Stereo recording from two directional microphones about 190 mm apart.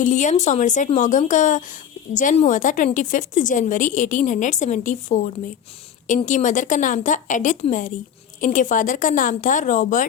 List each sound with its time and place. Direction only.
0.0 s a woman's voice: 40° left (ahead or behind)